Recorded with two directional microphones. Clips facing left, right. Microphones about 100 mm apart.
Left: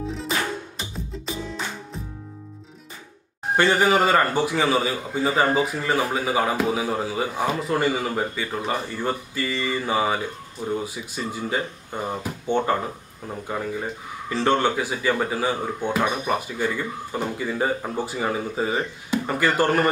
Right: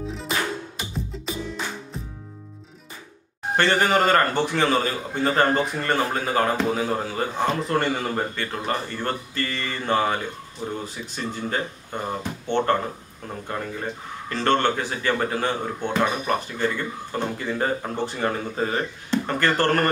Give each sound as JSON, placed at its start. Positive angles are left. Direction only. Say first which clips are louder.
{"t": 3.5, "sound": "a man's voice", "louder": "left 1 dB", "side_deg": 10}